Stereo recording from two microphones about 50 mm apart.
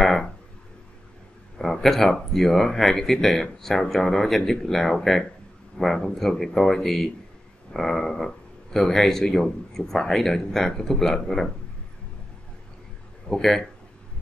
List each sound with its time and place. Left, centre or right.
0.0 s a sound: centre
1.6 s speech: centre
13.3 s speech: centre